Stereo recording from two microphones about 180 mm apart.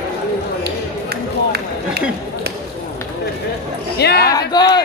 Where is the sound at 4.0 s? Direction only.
65° left (ahead or behind).